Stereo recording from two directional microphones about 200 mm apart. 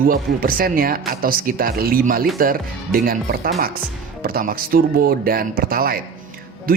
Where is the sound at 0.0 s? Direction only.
45° right (ahead or behind).